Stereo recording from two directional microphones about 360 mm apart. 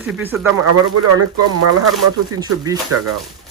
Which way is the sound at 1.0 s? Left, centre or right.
Right.